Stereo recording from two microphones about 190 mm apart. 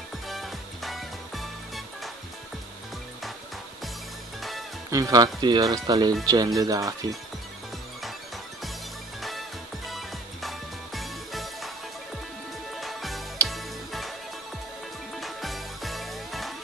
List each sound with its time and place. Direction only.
0.3 s music: centre (ahead or behind)
4.4 s music: centre (ahead or behind)
4.9 s speech: 20° right (ahead or behind)
9.2 s music: centre (ahead or behind)
12.8 s music: centre (ahead or behind)
15.1 s music: centre (ahead or behind)